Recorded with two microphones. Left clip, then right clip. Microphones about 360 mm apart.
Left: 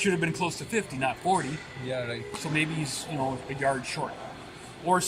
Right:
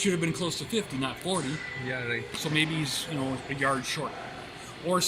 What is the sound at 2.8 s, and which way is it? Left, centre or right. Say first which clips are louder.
Speech: right 3 dB; left.